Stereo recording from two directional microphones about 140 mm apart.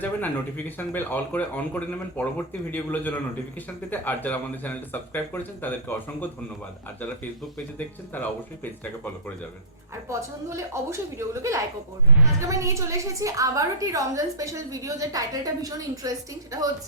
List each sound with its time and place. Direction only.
0.0 s speech: 10° left (ahead or behind)
8.1 s speech: 15° left (ahead or behind)
9.9 s a woman's voice: 20° right (ahead or behind)